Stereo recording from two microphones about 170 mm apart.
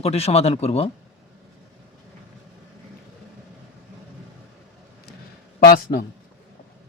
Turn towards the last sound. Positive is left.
turn(degrees=60)  # may be behind; listen again after turning